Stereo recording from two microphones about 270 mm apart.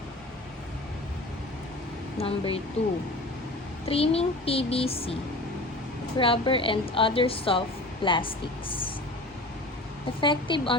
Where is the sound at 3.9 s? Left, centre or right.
Left.